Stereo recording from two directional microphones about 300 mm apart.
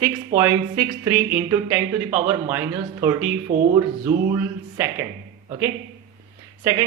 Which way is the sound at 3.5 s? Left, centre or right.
Right.